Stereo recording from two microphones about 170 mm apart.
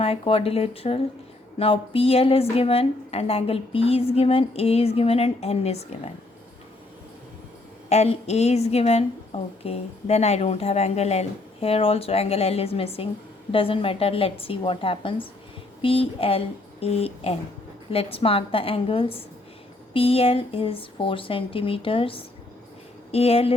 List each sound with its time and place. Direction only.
0.0 s a woman's voice: 35° left (ahead or behind)
7.9 s a woman's voice: 40° left (ahead or behind)